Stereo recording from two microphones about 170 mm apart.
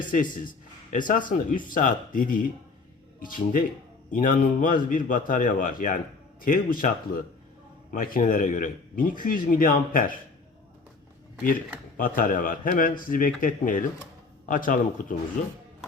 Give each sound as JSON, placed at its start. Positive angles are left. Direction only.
{"t": 0.1, "sound": "a man's voice", "side_deg": 50}
{"t": 11.9, "sound": "a man's voice", "side_deg": 55}